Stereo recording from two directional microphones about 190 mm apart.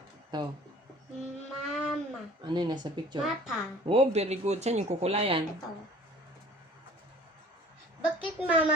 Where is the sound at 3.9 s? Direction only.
35° right (ahead or behind).